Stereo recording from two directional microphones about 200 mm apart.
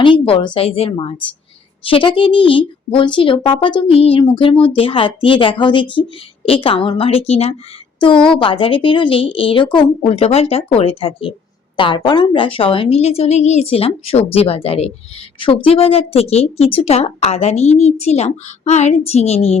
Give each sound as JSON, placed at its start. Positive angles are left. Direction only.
{"t": 0.0, "sound": "a woman's voice", "side_deg": 25}